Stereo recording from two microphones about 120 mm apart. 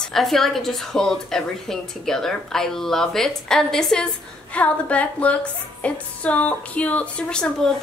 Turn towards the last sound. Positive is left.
turn(degrees=10)  # may be behind; listen again after turning